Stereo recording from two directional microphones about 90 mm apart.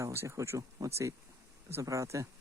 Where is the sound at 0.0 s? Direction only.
30° right (ahead or behind).